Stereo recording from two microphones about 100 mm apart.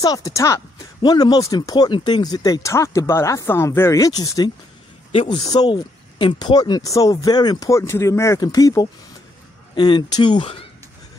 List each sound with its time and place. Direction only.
0.0 s speech: 35° left (ahead or behind)
1.9 s speech: 55° left (ahead or behind)
6.4 s speech: 45° left (ahead or behind)
7.7 s speech: 30° left (ahead or behind)
9.8 s speech: 50° left (ahead or behind)